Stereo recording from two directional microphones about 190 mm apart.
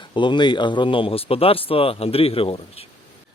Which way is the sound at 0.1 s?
25° left (ahead or behind).